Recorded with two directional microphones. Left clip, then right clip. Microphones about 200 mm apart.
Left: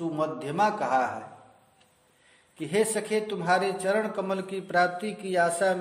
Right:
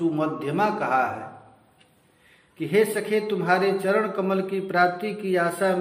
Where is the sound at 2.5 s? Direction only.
40° left (ahead or behind).